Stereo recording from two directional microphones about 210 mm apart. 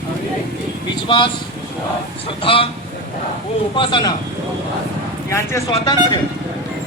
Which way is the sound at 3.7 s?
25° left (ahead or behind).